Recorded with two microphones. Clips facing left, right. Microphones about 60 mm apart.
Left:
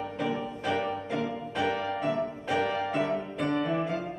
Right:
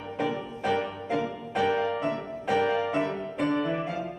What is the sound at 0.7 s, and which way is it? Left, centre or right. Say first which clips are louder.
Music: right 2 dB; centre.